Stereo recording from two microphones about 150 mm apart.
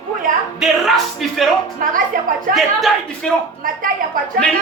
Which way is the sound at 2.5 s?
Centre (ahead or behind).